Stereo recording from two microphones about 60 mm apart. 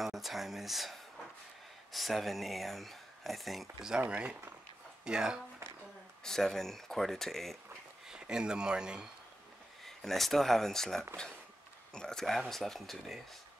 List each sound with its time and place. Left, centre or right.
0.0 s a sound: centre
1.9 s speech: centre
4.1 s speech: centre
6.2 s speech: centre
8.1 s speech: centre
9.8 s speech: centre